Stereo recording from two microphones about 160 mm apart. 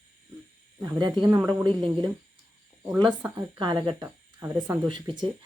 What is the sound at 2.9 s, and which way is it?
Speech, 5° right (ahead or behind).